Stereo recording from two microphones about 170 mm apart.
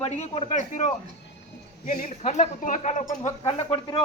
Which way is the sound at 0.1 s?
40° left (ahead or behind).